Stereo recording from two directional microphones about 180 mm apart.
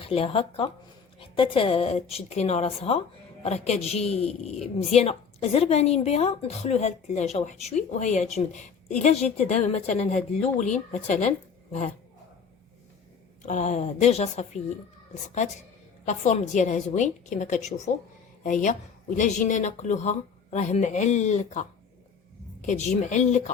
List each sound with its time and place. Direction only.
0.0 s a woman's voice: 30° left (ahead or behind)
13.4 s a woman's voice: 40° left (ahead or behind)
16.0 s a woman's voice: 40° left (ahead or behind)